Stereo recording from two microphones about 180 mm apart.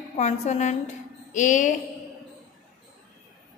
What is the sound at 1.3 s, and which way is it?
Music, 45° left (ahead or behind).